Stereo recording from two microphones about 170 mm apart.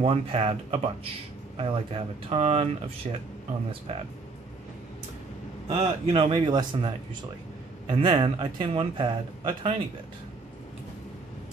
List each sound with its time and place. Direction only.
0.0 s speech: 35° right (ahead or behind)
5.7 s speech: 35° right (ahead or behind)
7.9 s speech: 30° right (ahead or behind)